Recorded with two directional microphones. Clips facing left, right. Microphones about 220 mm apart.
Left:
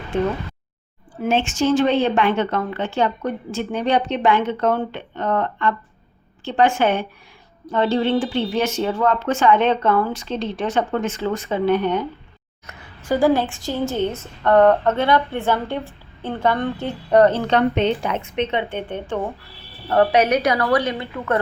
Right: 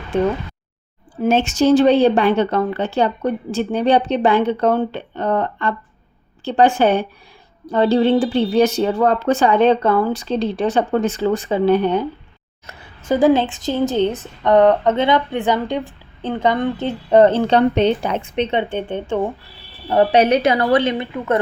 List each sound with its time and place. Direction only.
1.2 s a woman's voice: 40° right (ahead or behind)
20.1 s a woman's voice: 25° right (ahead or behind)